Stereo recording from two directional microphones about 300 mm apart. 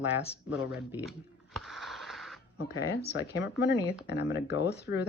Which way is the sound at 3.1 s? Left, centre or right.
Left.